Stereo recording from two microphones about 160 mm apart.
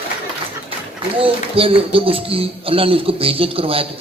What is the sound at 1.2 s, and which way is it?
Speech, 35° right (ahead or behind).